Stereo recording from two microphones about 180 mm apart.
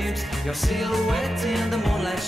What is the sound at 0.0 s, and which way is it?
Music, centre (ahead or behind).